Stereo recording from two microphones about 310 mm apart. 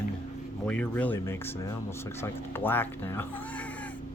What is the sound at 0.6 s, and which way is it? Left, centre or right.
Speech, centre.